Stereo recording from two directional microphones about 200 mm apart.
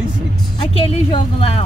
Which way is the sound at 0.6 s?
25° left (ahead or behind).